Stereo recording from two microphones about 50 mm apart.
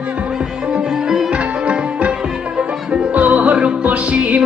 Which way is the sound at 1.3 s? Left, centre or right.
Right.